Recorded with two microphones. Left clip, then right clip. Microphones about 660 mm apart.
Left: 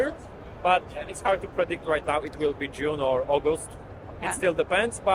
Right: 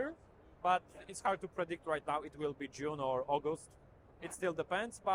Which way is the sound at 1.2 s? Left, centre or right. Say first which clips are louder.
Left 11 dB; right.